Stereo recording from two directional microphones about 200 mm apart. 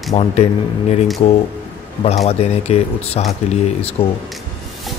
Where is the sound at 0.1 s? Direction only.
30° left (ahead or behind).